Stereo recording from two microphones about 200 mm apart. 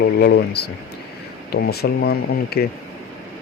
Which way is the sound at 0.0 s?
60° left (ahead or behind).